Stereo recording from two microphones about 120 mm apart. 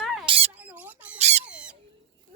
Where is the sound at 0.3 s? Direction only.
50° right (ahead or behind).